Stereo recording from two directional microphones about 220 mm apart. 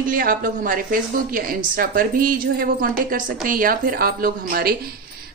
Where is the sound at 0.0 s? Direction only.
40° right (ahead or behind).